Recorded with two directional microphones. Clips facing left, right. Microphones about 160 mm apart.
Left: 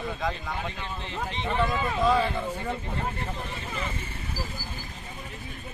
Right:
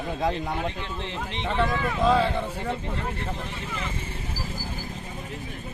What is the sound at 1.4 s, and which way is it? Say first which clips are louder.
Speech: right 2 dB; 20° right (ahead or behind).